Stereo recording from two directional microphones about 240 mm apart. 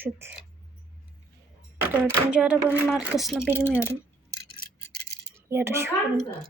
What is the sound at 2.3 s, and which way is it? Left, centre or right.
A woman's voice, centre.